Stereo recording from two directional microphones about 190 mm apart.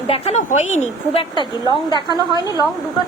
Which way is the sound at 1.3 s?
25° left (ahead or behind).